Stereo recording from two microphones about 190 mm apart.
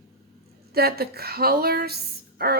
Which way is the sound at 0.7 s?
55° right (ahead or behind).